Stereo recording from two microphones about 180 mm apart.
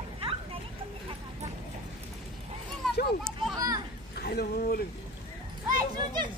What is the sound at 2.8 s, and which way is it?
Children playing, 5° left (ahead or behind).